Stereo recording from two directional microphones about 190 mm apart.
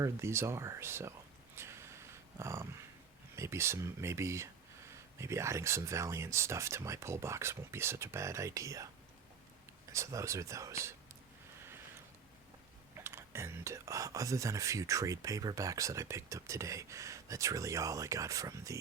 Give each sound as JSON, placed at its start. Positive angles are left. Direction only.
{"t": 0.0, "sound": "speech", "side_deg": -15}
{"t": 1.5, "sound": "dog", "side_deg": -15}
{"t": 3.3, "sound": "speech", "side_deg": -15}
{"t": 9.9, "sound": "speech", "side_deg": -15}
{"t": 13.0, "sound": "speech", "side_deg": -15}